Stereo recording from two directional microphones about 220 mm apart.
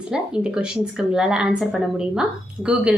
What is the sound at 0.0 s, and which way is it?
A woman's voice, 5° right (ahead or behind).